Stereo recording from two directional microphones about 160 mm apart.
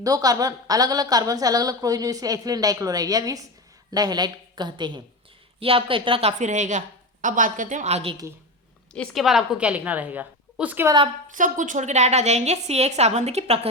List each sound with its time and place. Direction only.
0.0 s a woman's voice: 25° right (ahead or behind); by 8.1 s 45° right (ahead or behind)
8.9 s a woman's voice: centre (ahead or behind)
11.3 s a woman's voice: 55° right (ahead or behind)